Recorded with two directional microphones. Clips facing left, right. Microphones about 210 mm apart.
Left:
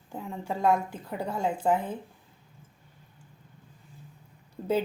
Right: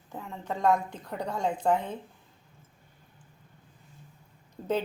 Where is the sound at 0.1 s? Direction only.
15° left (ahead or behind).